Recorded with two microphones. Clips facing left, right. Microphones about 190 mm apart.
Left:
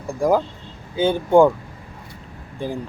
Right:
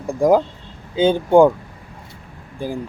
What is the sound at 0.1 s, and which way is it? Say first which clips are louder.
Speech: right 4 dB; 15° right (ahead or behind).